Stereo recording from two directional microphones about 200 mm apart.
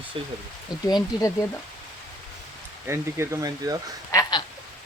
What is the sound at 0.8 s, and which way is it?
Speech, 20° left (ahead or behind).